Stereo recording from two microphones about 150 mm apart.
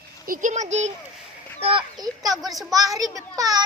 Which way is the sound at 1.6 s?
35° right (ahead or behind).